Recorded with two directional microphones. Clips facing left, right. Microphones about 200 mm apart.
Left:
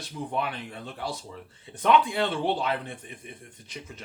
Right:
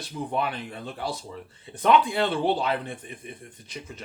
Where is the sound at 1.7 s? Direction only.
35° right (ahead or behind).